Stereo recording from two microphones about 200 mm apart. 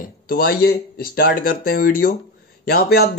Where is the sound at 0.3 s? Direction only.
50° left (ahead or behind).